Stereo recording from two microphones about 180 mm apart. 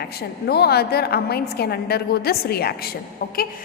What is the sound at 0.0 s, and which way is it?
A woman's voice, 60° left (ahead or behind).